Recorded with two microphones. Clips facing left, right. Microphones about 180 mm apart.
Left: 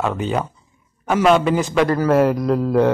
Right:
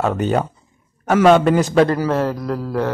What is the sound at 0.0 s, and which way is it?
A man's voice, 45° right (ahead or behind).